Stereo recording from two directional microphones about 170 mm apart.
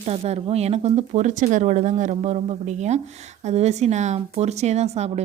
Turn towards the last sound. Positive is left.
turn(degrees=-40)  # may be behind; listen again after turning